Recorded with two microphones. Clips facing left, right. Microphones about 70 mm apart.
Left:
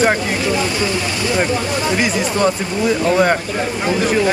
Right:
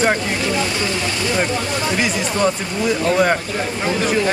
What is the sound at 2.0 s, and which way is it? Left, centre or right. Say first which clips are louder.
Speech: left 1 dB; centre.